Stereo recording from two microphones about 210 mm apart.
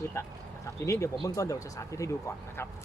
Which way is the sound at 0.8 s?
15° left (ahead or behind).